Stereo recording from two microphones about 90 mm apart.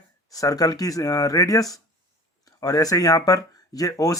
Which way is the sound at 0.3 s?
40° left (ahead or behind).